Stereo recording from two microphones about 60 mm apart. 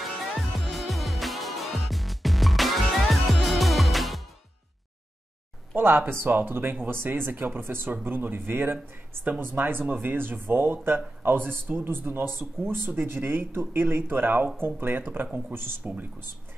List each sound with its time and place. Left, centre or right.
0.0 s music: centre
5.8 s a man's voice: right